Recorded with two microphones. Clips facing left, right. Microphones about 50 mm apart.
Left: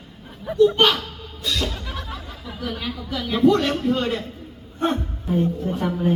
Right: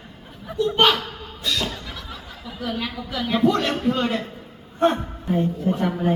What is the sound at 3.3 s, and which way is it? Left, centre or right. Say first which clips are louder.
Speech: left 3 dB; centre.